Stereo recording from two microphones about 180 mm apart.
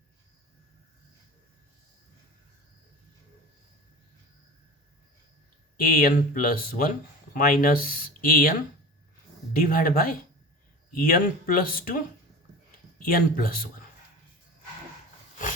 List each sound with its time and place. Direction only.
5.7 s speech: 50° left (ahead or behind)
9.6 s speech: 50° left (ahead or behind)
13.1 s speech: 50° left (ahead or behind)